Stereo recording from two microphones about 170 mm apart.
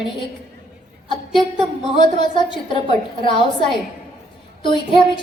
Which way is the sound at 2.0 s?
30° left (ahead or behind).